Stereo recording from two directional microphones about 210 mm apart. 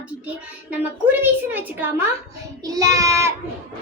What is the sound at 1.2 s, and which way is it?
A child's voice, 10° right (ahead or behind).